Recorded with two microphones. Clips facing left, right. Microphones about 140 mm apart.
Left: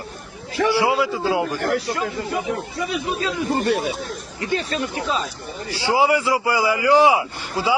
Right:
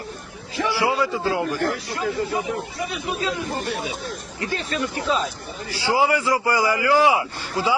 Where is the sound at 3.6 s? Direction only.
65° left (ahead or behind).